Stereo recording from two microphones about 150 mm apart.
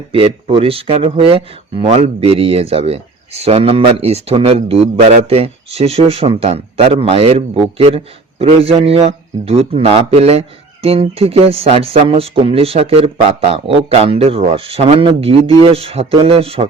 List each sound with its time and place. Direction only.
0.1 s speech: 40° right (ahead or behind)